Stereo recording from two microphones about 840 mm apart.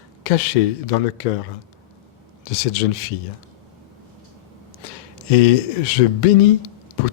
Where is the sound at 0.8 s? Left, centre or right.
Left.